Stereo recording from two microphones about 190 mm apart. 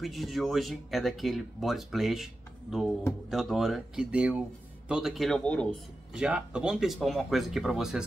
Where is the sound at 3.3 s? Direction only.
Centre (ahead or behind).